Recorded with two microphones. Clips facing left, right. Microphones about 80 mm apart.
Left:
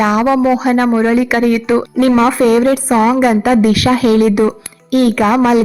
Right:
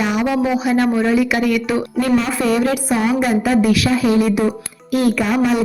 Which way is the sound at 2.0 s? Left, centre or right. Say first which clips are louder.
Left 7 dB; left.